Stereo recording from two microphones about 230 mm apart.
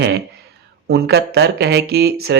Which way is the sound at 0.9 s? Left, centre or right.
Right.